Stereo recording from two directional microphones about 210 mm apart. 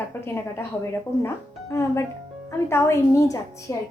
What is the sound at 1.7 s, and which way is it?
A woman's voice, 15° left (ahead or behind).